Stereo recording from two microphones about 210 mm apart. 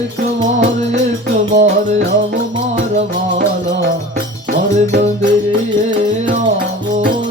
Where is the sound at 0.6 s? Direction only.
35° right (ahead or behind).